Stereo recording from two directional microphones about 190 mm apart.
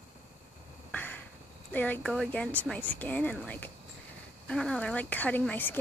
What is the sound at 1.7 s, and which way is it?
Speech, 10° left (ahead or behind).